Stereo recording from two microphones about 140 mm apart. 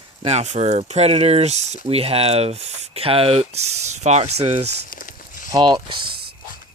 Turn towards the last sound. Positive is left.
turn(degrees=-35)  # may be behind; listen again after turning